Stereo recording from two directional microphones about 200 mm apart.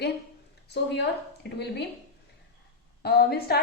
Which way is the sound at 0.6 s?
55° left (ahead or behind).